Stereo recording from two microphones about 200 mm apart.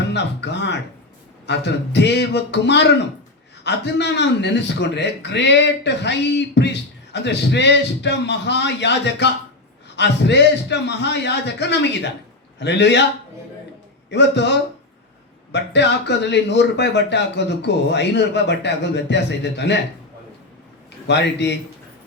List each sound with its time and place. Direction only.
0.1 s music: 60° left (ahead or behind)
1.5 s a man's voice: 60° left (ahead or behind)
14.1 s a man's voice: 60° left (ahead or behind)
21.1 s a man's voice: 60° left (ahead or behind)